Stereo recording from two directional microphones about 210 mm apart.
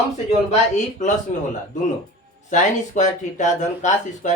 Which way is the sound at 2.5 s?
35° left (ahead or behind).